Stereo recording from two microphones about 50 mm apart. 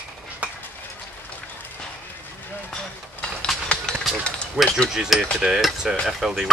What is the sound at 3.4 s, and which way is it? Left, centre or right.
Train, centre.